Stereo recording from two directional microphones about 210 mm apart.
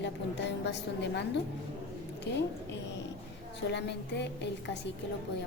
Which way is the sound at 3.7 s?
55° left (ahead or behind).